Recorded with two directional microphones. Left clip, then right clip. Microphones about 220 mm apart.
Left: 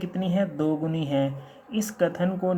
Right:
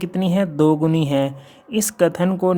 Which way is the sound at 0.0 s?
45° right (ahead or behind).